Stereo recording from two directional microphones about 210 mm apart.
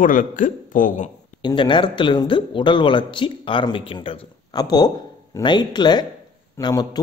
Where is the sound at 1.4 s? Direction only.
20° left (ahead or behind).